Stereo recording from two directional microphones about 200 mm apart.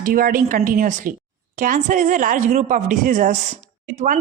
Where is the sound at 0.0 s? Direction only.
45° right (ahead or behind).